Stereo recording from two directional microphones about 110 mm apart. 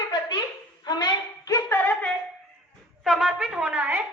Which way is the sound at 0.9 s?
40° left (ahead or behind).